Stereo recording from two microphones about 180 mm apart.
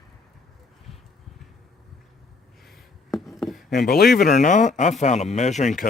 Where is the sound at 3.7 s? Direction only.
60° left (ahead or behind).